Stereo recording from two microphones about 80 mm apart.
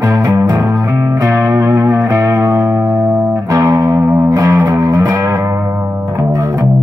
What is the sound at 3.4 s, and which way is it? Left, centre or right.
Music, right.